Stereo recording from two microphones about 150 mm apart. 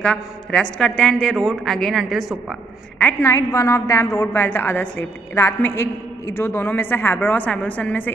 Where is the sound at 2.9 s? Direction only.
15° left (ahead or behind).